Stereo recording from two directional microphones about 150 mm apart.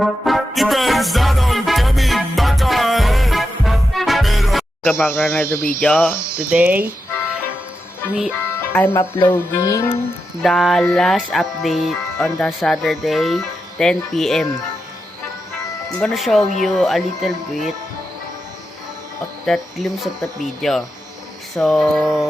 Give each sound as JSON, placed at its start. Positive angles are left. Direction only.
{"t": 0.0, "sound": "music", "side_deg": 0}
{"t": 4.9, "sound": "speech", "side_deg": 15}
{"t": 6.5, "sound": "speech", "side_deg": -10}
{"t": 8.7, "sound": "speech", "side_deg": 15}
{"t": 9.2, "sound": "music", "side_deg": 15}
{"t": 10.4, "sound": "music", "side_deg": 0}
{"t": 16.0, "sound": "music", "side_deg": 0}
{"t": 19.5, "sound": "music", "side_deg": 0}